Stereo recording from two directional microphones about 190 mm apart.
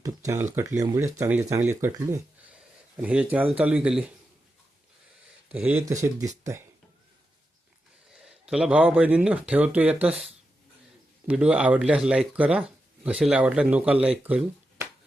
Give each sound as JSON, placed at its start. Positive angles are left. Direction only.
{"t": 0.0, "sound": "a sound", "side_deg": -15}
{"t": 0.5, "sound": "speech", "side_deg": -15}
{"t": 5.5, "sound": "speech", "side_deg": -10}
{"t": 8.2, "sound": "speech", "side_deg": -5}
{"t": 11.3, "sound": "speech", "side_deg": -5}
{"t": 14.3, "sound": "a sound", "side_deg": -10}